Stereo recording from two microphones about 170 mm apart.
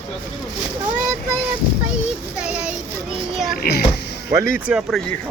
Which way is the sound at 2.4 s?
5° right (ahead or behind).